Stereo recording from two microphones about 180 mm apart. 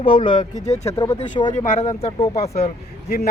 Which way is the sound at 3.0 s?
60° left (ahead or behind).